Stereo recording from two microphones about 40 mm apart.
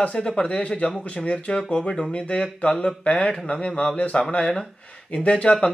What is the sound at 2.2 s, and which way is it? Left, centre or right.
Speech, left.